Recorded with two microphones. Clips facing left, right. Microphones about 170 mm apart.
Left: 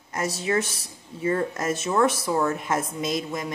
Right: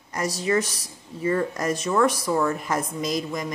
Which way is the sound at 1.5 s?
5° left (ahead or behind).